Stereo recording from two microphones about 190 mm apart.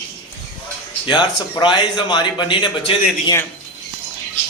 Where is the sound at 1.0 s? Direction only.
25° left (ahead or behind).